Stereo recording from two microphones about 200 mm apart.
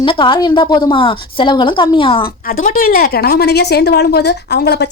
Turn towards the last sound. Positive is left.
turn(degrees=55)  # may be behind; listen again after turning